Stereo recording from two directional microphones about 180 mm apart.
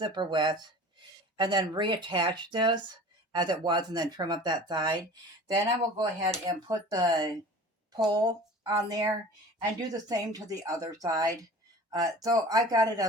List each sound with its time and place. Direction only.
0.0 s speech: 25° right (ahead or behind)
6.0 s speech: 25° right (ahead or behind)